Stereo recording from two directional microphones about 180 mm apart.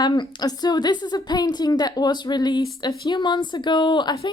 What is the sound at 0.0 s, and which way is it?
Speech, 25° left (ahead or behind).